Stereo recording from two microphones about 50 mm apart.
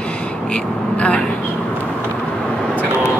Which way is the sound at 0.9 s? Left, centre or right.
Left.